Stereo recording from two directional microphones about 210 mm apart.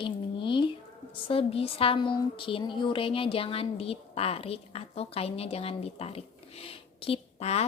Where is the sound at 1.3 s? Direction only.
25° left (ahead or behind).